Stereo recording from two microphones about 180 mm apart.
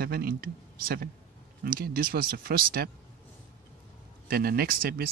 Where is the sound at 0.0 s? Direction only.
55° right (ahead or behind).